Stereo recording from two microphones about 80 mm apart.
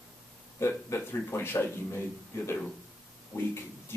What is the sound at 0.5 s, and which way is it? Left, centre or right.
Speech, left.